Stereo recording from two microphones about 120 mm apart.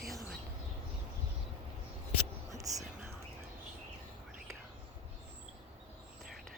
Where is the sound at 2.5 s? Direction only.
30° right (ahead or behind).